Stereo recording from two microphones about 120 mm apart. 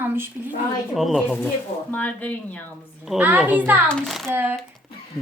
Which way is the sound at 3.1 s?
15° right (ahead or behind).